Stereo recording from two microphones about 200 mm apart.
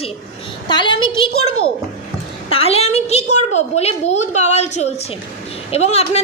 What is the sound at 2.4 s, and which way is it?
A woman's voice, 30° left (ahead or behind).